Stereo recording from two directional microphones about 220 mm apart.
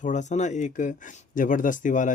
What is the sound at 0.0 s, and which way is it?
Speech, 35° left (ahead or behind).